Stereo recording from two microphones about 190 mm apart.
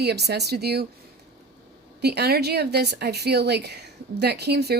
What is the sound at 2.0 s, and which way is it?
Speech, 60° right (ahead or behind).